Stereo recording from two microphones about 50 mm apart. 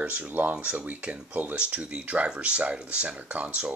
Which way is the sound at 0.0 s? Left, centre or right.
Right.